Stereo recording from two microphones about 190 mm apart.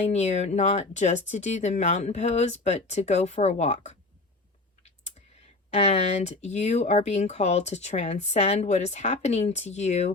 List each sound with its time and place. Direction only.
0.1 s speech: 35° left (ahead or behind)
4.8 s clicking: 35° left (ahead or behind)
5.7 s speech: 35° left (ahead or behind)